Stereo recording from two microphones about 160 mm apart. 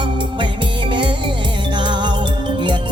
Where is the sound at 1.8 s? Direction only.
30° right (ahead or behind).